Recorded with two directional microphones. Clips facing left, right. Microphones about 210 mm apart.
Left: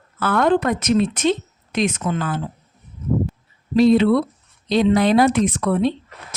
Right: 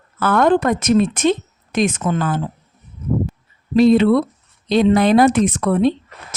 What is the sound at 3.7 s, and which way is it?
Speech, 55° right (ahead or behind).